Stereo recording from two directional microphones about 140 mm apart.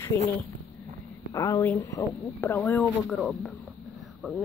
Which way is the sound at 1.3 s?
25° left (ahead or behind).